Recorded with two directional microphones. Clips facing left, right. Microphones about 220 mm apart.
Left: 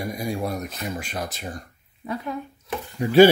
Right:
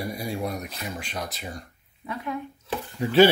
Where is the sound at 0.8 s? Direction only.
5° left (ahead or behind).